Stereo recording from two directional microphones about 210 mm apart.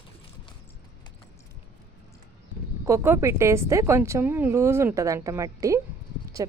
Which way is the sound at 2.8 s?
10° right (ahead or behind).